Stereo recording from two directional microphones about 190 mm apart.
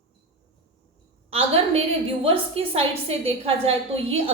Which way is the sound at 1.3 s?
30° right (ahead or behind).